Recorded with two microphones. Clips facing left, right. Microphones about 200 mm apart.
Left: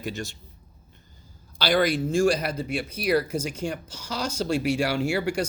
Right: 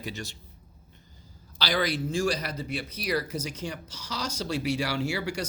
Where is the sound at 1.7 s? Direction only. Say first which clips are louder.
Left 6 dB; 50° left (ahead or behind).